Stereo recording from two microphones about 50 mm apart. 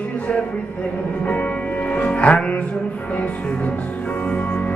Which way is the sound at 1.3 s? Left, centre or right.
Left.